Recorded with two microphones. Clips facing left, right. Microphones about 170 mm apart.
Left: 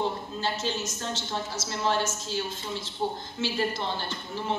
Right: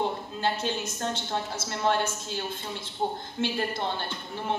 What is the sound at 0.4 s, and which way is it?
A woman's voice, 55° right (ahead or behind).